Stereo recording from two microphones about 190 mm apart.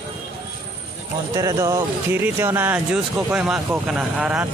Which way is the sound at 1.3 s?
20° right (ahead or behind).